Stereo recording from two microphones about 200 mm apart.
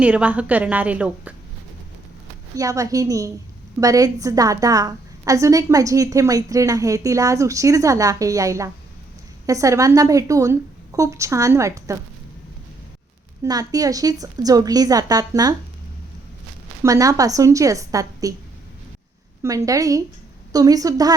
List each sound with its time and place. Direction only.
0.0 s a woman's voice: 5° right (ahead or behind)
2.6 s a woman's voice: 15° right (ahead or behind)
13.4 s a woman's voice: 20° right (ahead or behind)
16.8 s a woman's voice: 15° right (ahead or behind)
19.4 s a woman's voice: 15° right (ahead or behind)